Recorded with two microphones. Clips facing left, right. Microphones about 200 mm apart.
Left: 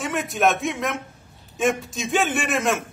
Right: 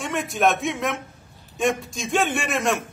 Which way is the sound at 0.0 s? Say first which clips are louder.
Even; centre (ahead or behind).